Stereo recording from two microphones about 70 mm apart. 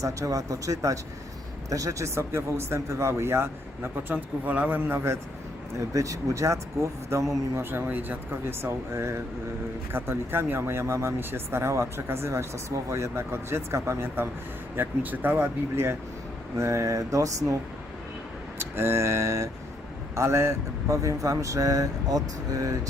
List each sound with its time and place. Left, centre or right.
0.0 s speech: right
4.1 s speech: right
4.8 s speech: right
5.9 s speech: right
7.5 s speech: right
8.9 s speech: right
14.8 s speech: right
15.7 s speech: right
18.6 s speech: right